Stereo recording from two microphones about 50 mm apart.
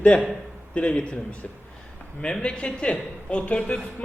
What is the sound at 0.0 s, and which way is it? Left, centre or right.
A man's voice, left.